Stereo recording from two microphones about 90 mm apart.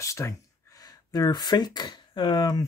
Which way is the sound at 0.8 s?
50° left (ahead or behind).